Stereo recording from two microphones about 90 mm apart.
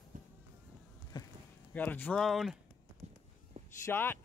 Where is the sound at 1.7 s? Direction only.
20° left (ahead or behind).